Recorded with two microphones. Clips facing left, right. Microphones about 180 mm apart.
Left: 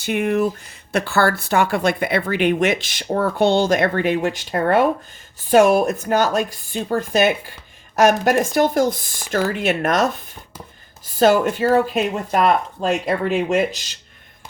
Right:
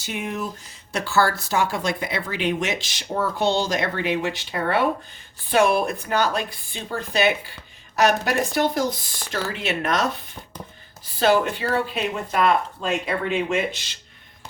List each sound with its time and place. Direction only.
0.0 s speech: 60° left (ahead or behind); by 13.9 s 40° left (ahead or behind)